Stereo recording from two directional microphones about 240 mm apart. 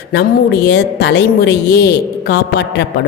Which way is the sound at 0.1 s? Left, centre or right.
Left.